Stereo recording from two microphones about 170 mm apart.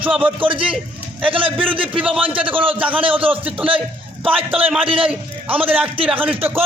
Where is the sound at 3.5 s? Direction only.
30° right (ahead or behind).